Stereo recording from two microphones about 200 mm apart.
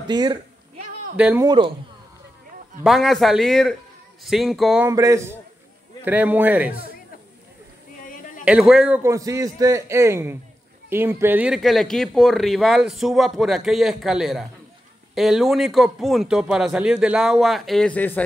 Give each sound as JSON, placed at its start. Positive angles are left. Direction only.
{"t": 0.1, "sound": "speech", "side_deg": -20}
{"t": 1.1, "sound": "a man's voice", "side_deg": -5}
{"t": 1.4, "sound": "speech", "side_deg": -20}
{"t": 2.8, "sound": "speech", "side_deg": 0}
{"t": 4.8, "sound": "a man's voice", "side_deg": -15}
{"t": 8.5, "sound": "a man's voice", "side_deg": -5}